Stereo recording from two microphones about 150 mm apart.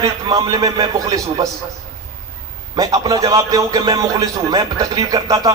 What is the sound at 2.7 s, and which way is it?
A man's voice, 25° right (ahead or behind).